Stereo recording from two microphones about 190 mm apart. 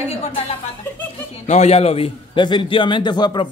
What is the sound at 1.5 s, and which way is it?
A man's voice, 35° left (ahead or behind).